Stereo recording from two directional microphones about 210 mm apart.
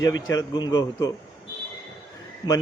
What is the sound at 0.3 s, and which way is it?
Speech, 20° left (ahead or behind).